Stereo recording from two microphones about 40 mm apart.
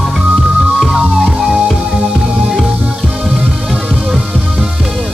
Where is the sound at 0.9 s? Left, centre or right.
Centre.